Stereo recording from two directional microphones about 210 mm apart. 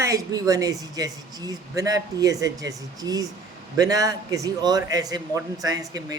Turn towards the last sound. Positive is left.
turn(degrees=-15)  # may be behind; listen again after turning